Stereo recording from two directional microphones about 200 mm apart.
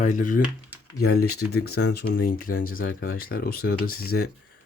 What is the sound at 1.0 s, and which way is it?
Speech, 50° left (ahead or behind).